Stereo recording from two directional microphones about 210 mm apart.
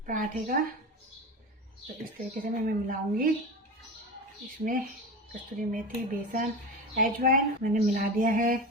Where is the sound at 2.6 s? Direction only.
40° right (ahead or behind).